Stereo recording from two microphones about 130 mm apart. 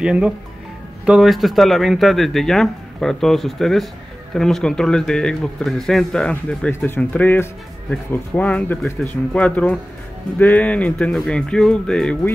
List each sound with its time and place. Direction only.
0.0 s speech: 5° right (ahead or behind)
6.7 s speech: 20° left (ahead or behind)